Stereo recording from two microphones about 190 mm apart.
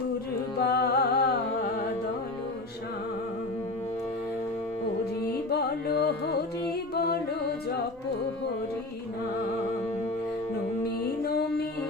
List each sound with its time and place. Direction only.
0.6 s music: 55° left (ahead or behind)
5.5 s carnatic music: 55° left (ahead or behind)
6.9 s a capella: 55° left (ahead or behind)